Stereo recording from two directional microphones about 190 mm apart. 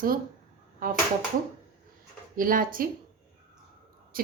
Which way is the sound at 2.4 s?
45° right (ahead or behind).